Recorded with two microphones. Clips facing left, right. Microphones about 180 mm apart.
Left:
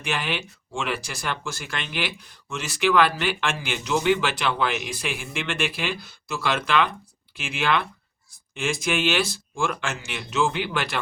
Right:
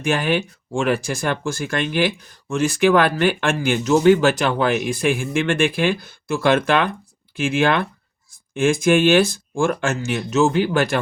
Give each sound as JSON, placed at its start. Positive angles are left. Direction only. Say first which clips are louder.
{"t": 0.0, "sound": "speech", "louder": "right 9 dB", "side_deg": -45}